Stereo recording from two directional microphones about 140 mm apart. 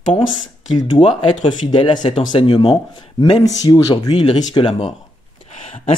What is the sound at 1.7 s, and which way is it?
Speech, 35° left (ahead or behind).